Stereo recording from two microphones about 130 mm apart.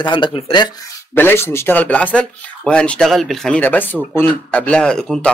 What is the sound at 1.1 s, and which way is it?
Speech, 15° left (ahead or behind).